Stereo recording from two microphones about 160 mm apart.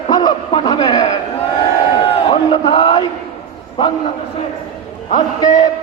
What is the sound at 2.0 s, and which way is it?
A man's voice, 35° left (ahead or behind).